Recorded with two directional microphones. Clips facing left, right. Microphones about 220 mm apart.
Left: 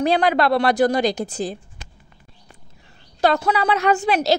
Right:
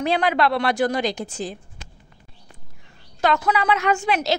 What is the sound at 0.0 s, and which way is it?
A woman's voice, 40° left (ahead or behind).